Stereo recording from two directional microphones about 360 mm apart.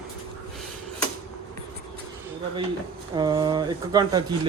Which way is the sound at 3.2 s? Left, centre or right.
Centre.